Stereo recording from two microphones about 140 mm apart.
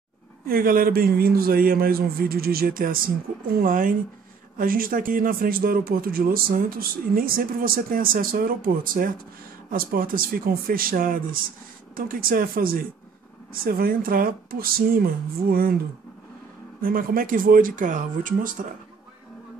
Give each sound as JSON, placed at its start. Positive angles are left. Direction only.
{"t": 0.5, "sound": "speech", "side_deg": -90}
{"t": 3.5, "sound": "speech", "side_deg": -80}
{"t": 4.6, "sound": "speech", "side_deg": -90}
{"t": 16.8, "sound": "speech", "side_deg": -90}